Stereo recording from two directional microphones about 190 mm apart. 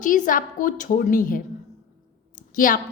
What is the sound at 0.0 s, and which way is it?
A woman's voice, 45° left (ahead or behind).